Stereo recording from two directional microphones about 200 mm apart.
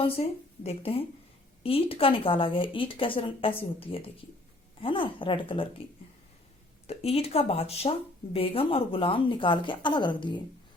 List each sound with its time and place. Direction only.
0.0 s speech: 30° left (ahead or behind)
6.8 s speech: 30° left (ahead or behind)